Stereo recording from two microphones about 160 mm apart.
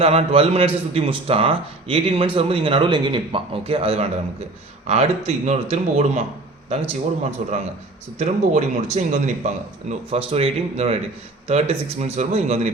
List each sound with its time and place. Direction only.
0.0 s a man's voice: 40° right (ahead or behind)